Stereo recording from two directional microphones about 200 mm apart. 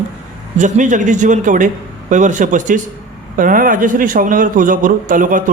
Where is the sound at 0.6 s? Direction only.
40° right (ahead or behind).